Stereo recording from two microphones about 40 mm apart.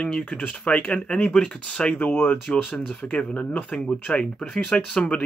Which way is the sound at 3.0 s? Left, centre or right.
Left.